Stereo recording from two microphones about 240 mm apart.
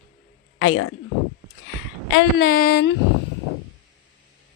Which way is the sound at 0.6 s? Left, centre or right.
Left.